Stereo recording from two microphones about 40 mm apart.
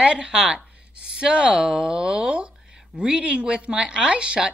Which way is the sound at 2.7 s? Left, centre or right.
Centre.